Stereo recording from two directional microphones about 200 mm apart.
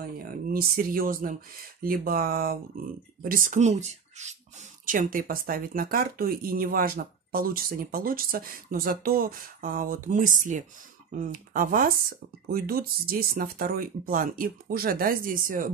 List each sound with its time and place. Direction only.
0.5 s speech: 45° right (ahead or behind)